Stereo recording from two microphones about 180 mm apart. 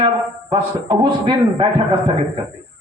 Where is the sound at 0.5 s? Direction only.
25° right (ahead or behind).